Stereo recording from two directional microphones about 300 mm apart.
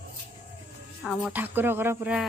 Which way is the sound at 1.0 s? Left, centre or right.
Centre.